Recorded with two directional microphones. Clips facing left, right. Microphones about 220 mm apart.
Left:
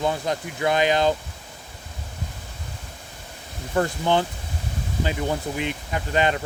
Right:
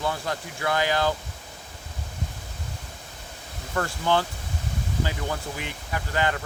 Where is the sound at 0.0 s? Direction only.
20° left (ahead or behind).